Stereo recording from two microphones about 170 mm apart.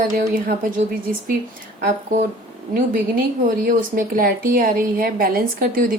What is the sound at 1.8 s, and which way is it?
Speech, 50° right (ahead or behind).